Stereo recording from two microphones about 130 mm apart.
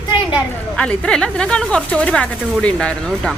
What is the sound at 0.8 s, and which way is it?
Speech, 5° left (ahead or behind).